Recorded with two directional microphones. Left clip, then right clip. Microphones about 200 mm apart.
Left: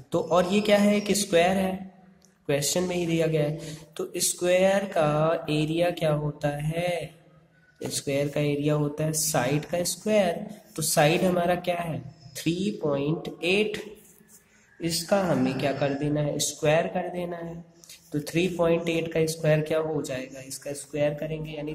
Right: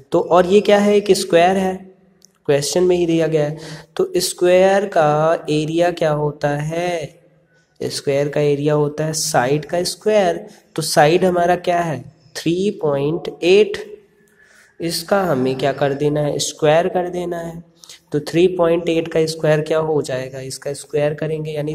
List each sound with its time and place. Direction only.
0.1 s speech: 15° right (ahead or behind)